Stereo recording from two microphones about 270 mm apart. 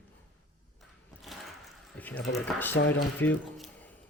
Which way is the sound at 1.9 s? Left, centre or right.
Centre.